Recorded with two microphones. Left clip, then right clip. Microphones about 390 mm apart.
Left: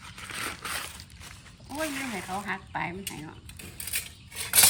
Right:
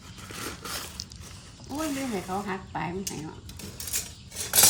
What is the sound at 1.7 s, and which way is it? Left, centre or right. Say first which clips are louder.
Speech: right 1 dB; centre.